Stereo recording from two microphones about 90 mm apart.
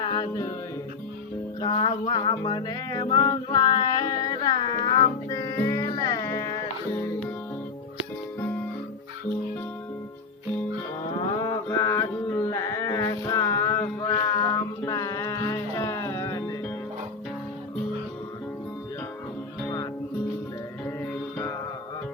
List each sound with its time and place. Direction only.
0.2 s music: 40° left (ahead or behind)
1.6 s music: 70° left (ahead or behind)
3.5 s music: 50° left (ahead or behind)
11.3 s music: 40° left (ahead or behind)
14.1 s child singing: 40° left (ahead or behind)
19.6 s music: 50° left (ahead or behind)
20.8 s music: 20° left (ahead or behind)